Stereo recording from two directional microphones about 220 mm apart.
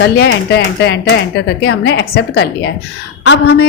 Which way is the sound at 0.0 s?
50° left (ahead or behind).